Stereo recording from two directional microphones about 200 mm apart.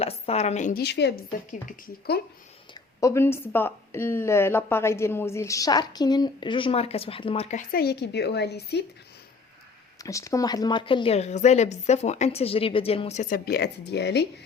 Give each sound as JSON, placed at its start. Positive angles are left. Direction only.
{"t": 0.0, "sound": "a woman's voice", "side_deg": 30}
{"t": 0.8, "sound": "speech", "side_deg": 55}
{"t": 3.0, "sound": "speech", "side_deg": 15}
{"t": 7.7, "sound": "speech", "side_deg": 50}
{"t": 10.0, "sound": "a woman's voice", "side_deg": 15}
{"t": 13.3, "sound": "speech", "side_deg": 55}